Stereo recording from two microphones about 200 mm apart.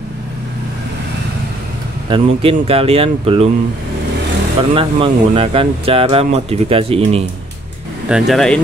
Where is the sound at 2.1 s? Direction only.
30° right (ahead or behind).